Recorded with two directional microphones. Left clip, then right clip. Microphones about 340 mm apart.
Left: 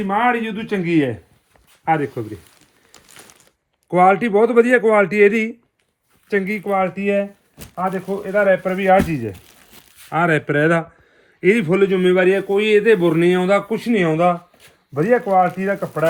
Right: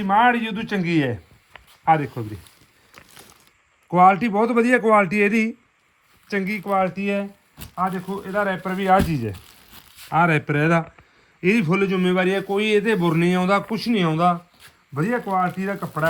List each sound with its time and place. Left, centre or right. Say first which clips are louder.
0.0 s speech: even; centre
3.8 s a man's voice: left 1 dB; centre